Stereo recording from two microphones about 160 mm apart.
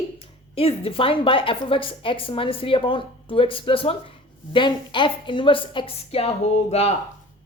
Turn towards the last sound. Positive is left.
turn(degrees=40)  # may be behind; listen again after turning